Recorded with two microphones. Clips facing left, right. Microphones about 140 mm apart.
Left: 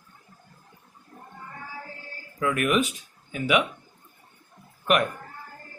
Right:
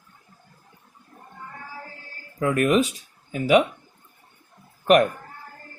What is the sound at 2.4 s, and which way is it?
Speech, 35° right (ahead or behind).